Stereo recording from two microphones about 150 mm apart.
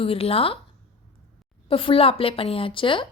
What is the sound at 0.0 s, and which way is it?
Speech, 40° left (ahead or behind).